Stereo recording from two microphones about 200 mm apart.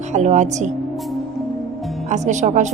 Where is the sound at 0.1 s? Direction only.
35° right (ahead or behind).